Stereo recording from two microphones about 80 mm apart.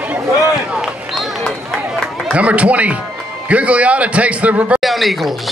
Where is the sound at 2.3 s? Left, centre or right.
Centre.